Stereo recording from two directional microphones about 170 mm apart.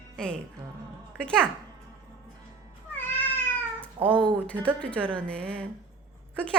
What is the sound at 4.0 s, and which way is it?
Speech, 30° right (ahead or behind).